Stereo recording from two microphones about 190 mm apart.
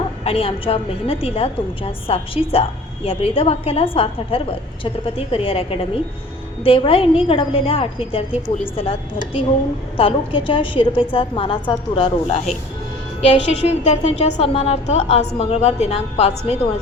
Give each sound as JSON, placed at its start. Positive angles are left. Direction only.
{"t": 0.3, "sound": "a woman's voice", "side_deg": 30}